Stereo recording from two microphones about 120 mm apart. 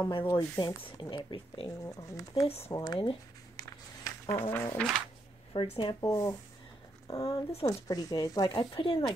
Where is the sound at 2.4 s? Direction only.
55° left (ahead or behind).